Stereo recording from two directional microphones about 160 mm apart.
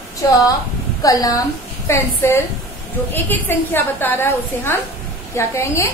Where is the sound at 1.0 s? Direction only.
20° left (ahead or behind).